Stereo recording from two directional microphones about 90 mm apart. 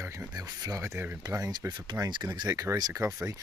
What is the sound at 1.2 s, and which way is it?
Speech, 45° right (ahead or behind).